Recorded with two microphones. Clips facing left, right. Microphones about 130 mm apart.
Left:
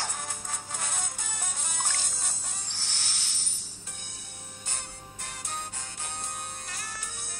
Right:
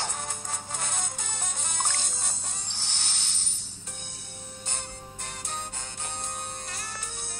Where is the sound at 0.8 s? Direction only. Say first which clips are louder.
Right 2 dB; 5° left (ahead or behind).